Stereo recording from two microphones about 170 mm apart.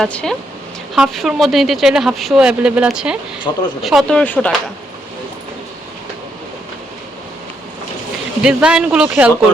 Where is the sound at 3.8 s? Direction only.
Centre (ahead or behind).